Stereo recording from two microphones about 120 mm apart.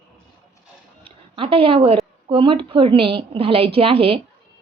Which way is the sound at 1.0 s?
50° right (ahead or behind).